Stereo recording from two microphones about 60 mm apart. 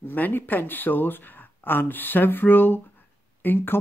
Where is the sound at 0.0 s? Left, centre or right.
Left.